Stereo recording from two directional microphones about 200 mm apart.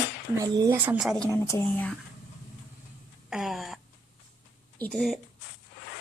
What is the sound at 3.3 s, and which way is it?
Speech, centre (ahead or behind).